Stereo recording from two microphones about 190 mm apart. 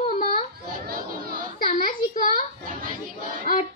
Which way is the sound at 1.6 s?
45° left (ahead or behind).